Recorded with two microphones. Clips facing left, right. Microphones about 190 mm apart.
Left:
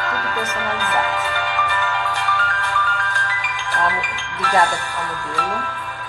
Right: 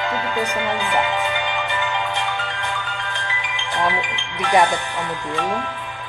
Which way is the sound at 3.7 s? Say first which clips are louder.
Right 1 dB; 20° right (ahead or behind).